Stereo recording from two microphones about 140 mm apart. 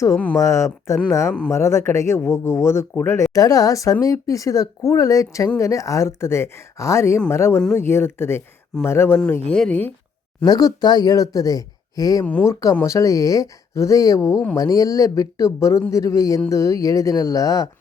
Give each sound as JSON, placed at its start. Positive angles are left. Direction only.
{"t": 0.3, "sound": "speech", "side_deg": 20}
{"t": 3.3, "sound": "speech", "side_deg": 25}
{"t": 10.4, "sound": "speech", "side_deg": 25}
{"t": 12.2, "sound": "speech", "side_deg": 10}
{"t": 12.8, "sound": "speech", "side_deg": 20}